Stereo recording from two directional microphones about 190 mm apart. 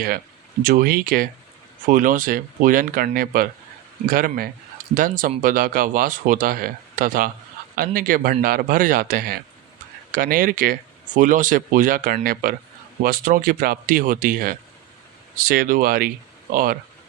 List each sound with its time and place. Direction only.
0.6 s speech: 45° right (ahead or behind)